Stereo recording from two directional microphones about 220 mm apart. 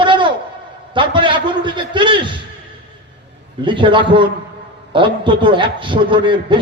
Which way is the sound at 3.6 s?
20° right (ahead or behind).